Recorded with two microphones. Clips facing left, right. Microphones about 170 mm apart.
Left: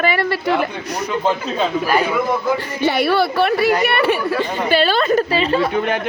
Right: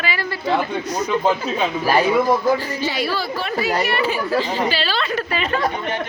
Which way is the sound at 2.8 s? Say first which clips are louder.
Left 7 dB; 60° left (ahead or behind).